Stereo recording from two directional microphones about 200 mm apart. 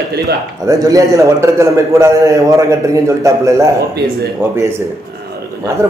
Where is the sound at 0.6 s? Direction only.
15° right (ahead or behind).